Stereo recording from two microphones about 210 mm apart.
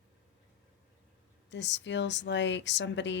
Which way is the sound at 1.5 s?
55° left (ahead or behind).